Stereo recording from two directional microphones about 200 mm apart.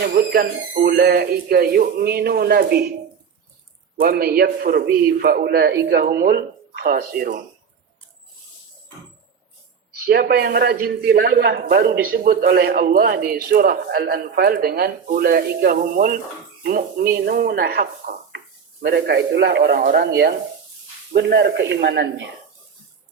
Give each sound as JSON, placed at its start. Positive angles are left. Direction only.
{"t": 0.3, "sound": "a man's voice", "side_deg": -50}
{"t": 4.0, "sound": "a man's voice", "side_deg": -50}
{"t": 9.9, "sound": "a man's voice", "side_deg": -50}